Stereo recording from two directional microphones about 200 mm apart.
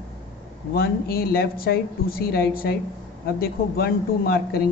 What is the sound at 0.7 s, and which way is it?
A man's voice, 50° left (ahead or behind).